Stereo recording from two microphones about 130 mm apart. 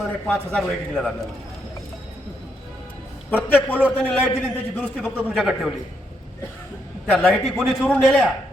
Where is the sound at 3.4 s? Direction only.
15° left (ahead or behind).